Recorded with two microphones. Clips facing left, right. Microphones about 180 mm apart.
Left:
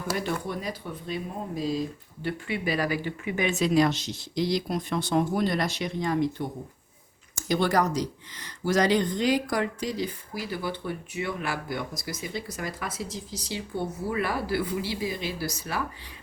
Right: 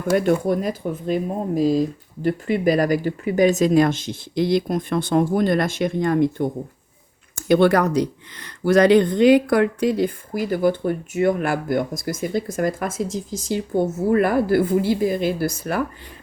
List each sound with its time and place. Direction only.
0.1 s speech: 55° right (ahead or behind)
2.2 s speech: 45° right (ahead or behind)